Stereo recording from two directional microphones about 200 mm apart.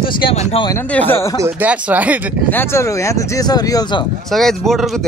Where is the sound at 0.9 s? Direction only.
10° left (ahead or behind).